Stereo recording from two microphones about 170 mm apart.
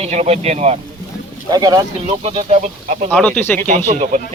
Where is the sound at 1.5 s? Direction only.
25° right (ahead or behind).